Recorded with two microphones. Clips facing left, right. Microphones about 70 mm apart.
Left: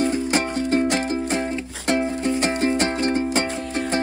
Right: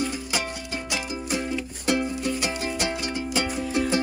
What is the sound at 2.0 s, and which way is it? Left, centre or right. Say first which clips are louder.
Music: left 5 dB; left.